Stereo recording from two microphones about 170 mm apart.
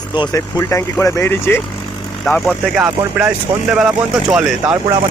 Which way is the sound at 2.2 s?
Centre (ahead or behind).